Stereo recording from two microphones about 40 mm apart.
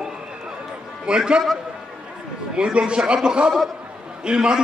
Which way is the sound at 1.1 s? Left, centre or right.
Centre.